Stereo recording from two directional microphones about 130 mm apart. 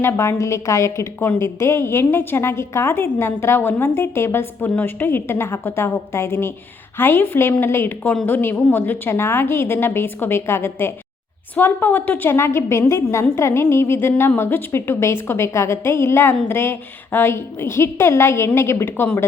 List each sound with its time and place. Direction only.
0.0 s a woman's voice: 20° left (ahead or behind)